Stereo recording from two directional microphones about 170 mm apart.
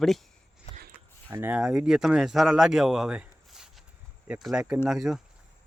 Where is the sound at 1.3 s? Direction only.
10° right (ahead or behind).